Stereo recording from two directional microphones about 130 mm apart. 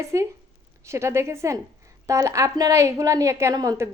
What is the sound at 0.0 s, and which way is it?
Speech, 20° right (ahead or behind).